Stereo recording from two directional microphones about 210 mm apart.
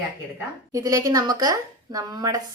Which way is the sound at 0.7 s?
15° right (ahead or behind).